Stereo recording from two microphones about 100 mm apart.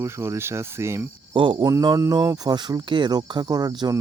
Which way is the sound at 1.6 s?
40° right (ahead or behind).